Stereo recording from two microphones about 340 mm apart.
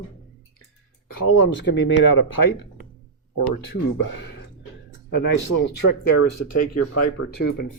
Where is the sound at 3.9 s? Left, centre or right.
Left.